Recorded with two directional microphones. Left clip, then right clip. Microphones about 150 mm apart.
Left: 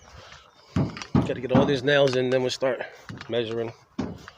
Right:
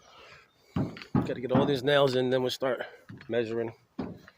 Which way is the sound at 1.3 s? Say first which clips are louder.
Left 4 dB; 45° right (ahead or behind).